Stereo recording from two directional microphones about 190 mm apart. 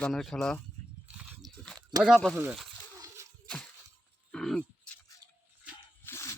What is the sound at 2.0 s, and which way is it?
Speech, centre (ahead or behind).